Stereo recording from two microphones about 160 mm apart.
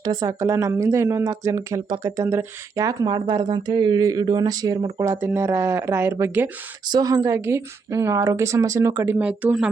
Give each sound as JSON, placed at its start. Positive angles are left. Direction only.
{"t": 0.0, "sound": "speech", "side_deg": -25}
{"t": 6.8, "sound": "a woman's voice", "side_deg": -25}